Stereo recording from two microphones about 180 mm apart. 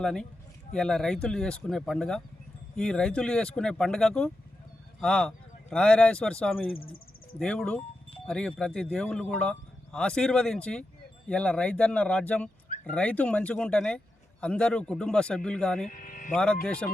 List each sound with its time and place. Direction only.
0.0 s speech: 5° left (ahead or behind)
15.9 s music: 50° left (ahead or behind)
16.3 s speech: 5° left (ahead or behind)